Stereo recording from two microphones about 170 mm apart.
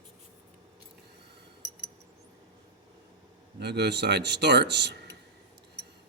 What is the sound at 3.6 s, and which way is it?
Speech, 80° right.